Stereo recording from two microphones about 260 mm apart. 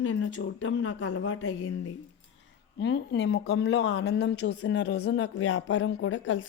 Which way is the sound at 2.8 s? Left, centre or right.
Left.